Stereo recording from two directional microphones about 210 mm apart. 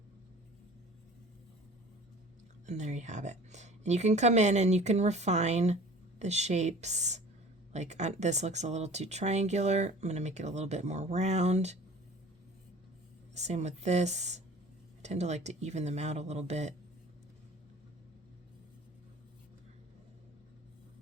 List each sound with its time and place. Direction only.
2.6 s a woman's voice: 35° right (ahead or behind)
13.3 s a woman's voice: 30° right (ahead or behind)